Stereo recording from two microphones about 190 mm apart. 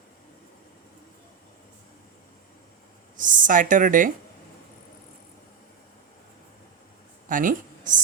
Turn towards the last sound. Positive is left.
turn(degrees=-45)  # may be behind; listen again after turning